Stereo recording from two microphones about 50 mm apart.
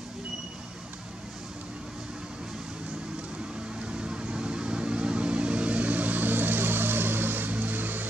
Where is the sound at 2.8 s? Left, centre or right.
Right.